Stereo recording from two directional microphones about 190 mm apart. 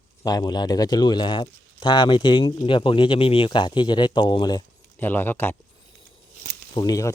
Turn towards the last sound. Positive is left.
turn(degrees=20)  # may be behind; listen again after turning